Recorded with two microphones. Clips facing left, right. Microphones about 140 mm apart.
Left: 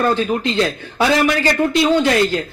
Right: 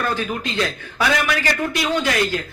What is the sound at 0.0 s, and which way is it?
Speech, 30° left (ahead or behind).